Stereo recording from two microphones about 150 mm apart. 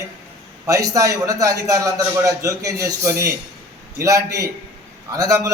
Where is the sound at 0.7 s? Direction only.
20° right (ahead or behind).